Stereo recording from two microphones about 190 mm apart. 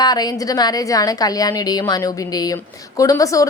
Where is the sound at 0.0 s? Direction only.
20° left (ahead or behind).